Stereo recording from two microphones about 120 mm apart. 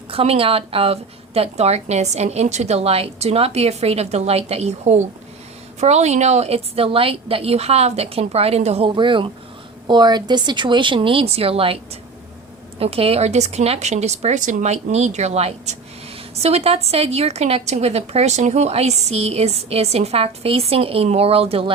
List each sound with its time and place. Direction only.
0.1 s speech: 50° right (ahead or behind)
9.0 s speech: 45° right (ahead or behind)
12.8 s a woman's voice: 55° right (ahead or behind)